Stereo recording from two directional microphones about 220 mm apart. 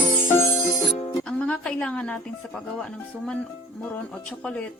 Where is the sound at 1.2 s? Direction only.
5° left (ahead or behind).